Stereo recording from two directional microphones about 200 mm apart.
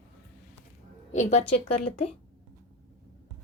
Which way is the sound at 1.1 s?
35° left (ahead or behind).